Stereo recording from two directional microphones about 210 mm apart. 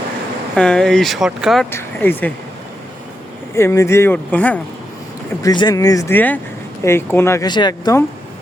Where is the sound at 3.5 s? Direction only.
15° left (ahead or behind).